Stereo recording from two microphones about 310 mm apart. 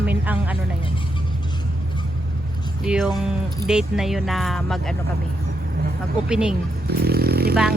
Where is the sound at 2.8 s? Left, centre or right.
Centre.